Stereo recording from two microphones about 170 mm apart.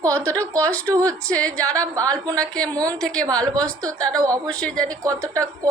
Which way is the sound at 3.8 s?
20° right (ahead or behind).